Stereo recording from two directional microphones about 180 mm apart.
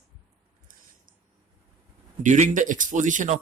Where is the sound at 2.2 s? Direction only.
45° right (ahead or behind).